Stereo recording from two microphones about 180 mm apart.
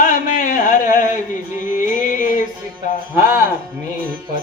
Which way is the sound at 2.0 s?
45° left (ahead or behind).